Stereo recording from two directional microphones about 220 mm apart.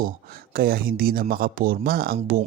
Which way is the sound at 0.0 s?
40° right (ahead or behind).